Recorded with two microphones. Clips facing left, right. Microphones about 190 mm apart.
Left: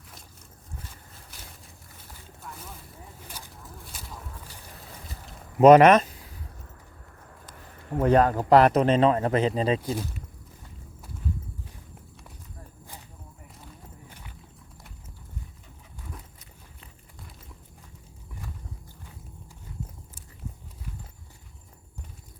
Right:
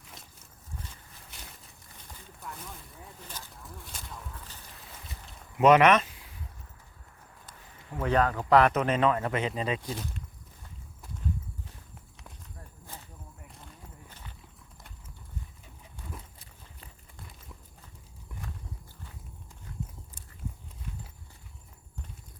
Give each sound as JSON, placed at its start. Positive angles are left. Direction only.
{"t": 5.5, "sound": "speech", "side_deg": 40}
{"t": 7.9, "sound": "speech", "side_deg": 45}
{"t": 14.1, "sound": "horse", "side_deg": 10}